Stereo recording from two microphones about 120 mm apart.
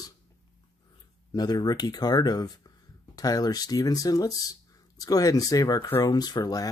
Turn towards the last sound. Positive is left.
turn(degrees=35)  # may be behind; listen again after turning